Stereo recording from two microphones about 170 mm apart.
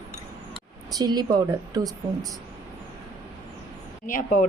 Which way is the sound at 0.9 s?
25° right (ahead or behind).